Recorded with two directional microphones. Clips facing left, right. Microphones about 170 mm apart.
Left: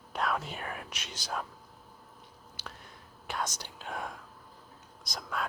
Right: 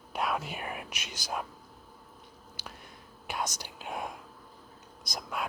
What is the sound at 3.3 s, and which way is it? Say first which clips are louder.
Speech: right 1 dB; 15° right (ahead or behind).